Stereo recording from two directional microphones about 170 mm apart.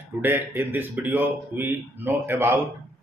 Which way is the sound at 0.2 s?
15° right (ahead or behind).